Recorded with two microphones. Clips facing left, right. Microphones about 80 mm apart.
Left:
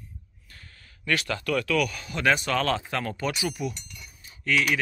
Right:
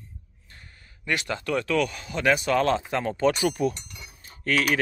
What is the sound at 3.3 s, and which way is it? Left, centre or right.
Chink, right.